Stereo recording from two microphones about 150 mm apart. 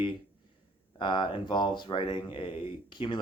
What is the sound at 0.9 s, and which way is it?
Speech, 30° left (ahead or behind).